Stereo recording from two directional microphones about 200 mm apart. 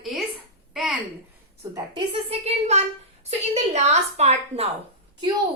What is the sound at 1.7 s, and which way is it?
A woman's voice, 30° right (ahead or behind).